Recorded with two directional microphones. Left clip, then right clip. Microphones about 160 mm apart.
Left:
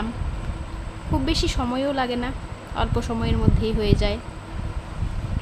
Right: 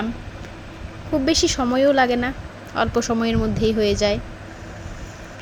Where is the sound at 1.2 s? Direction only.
30° right (ahead or behind).